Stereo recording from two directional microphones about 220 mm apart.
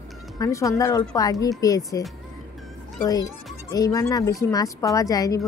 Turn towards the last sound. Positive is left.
turn(degrees=15)  # may be behind; listen again after turning